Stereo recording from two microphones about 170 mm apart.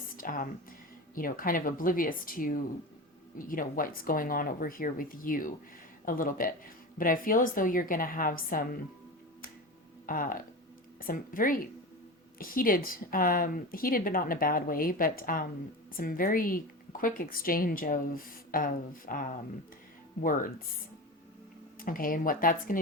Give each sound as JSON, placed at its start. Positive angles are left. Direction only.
{"t": 0.2, "sound": "a sound", "side_deg": 55}
{"t": 1.1, "sound": "speech", "side_deg": 55}
{"t": 10.1, "sound": "speech", "side_deg": 55}
{"t": 21.8, "sound": "speech", "side_deg": 55}